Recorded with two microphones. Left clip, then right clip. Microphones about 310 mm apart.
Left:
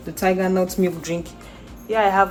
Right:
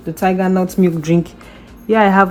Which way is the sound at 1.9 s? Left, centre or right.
Right.